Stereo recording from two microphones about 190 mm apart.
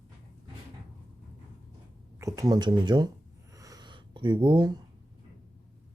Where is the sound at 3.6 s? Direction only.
20° right (ahead or behind).